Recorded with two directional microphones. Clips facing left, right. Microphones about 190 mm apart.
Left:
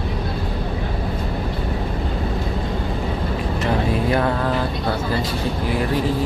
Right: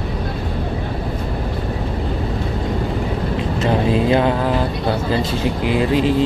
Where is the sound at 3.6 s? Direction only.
20° right (ahead or behind).